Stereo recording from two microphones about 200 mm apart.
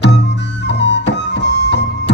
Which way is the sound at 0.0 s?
60° left (ahead or behind).